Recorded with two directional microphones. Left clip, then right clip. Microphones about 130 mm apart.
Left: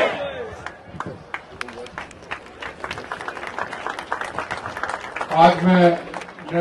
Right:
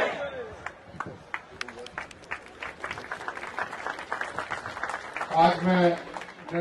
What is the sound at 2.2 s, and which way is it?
Run, 30° left (ahead or behind).